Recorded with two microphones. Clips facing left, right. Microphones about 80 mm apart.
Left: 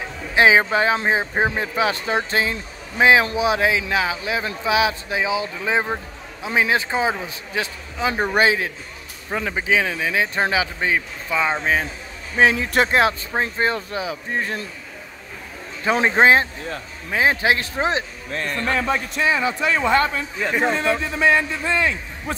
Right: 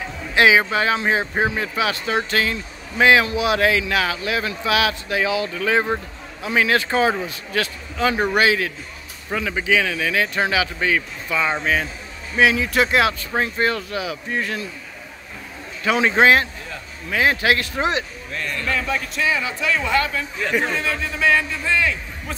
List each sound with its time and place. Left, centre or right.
0.4 s a man's voice: left
15.8 s a man's voice: left